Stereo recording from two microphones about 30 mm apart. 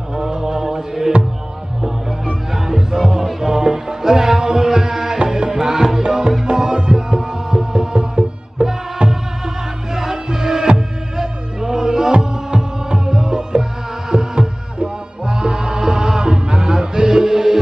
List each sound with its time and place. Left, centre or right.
0.1 s music: right
2.5 s music: centre
14.1 s music: right